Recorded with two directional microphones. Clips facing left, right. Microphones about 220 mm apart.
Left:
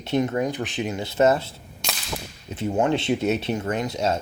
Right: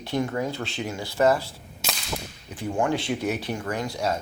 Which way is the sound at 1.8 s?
Centre (ahead or behind).